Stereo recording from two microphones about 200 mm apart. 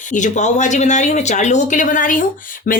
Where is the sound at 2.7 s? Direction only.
45° left (ahead or behind).